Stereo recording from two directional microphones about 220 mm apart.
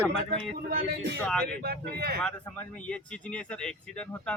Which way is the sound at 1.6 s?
45° right (ahead or behind).